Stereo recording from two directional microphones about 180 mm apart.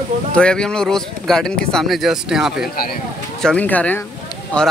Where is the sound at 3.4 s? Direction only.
5° left (ahead or behind).